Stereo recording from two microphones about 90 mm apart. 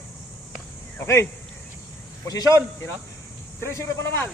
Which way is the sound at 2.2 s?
40° left (ahead or behind).